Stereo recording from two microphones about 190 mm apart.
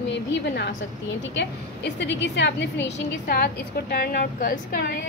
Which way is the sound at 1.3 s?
65° left (ahead or behind).